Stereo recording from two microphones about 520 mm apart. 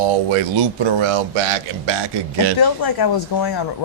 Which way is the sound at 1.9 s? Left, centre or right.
Right.